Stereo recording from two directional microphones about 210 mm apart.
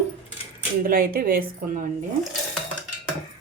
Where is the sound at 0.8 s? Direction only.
45° right (ahead or behind).